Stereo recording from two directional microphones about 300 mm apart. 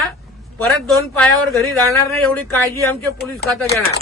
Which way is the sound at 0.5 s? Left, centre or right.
Centre.